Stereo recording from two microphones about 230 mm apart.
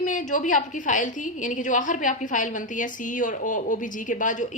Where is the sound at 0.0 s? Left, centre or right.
Left.